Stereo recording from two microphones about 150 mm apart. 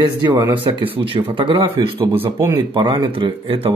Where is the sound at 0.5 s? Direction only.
35° right (ahead or behind).